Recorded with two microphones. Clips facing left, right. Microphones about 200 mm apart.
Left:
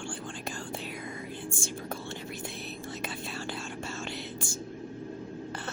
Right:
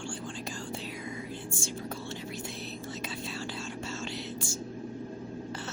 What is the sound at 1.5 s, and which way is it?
Whispering, 55° left (ahead or behind).